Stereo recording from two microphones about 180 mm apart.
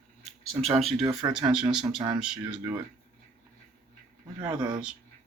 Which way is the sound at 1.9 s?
25° right (ahead or behind).